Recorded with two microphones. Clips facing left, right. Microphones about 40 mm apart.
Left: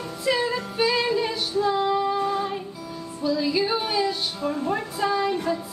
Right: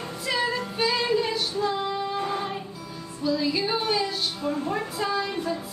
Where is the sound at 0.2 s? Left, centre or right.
Centre.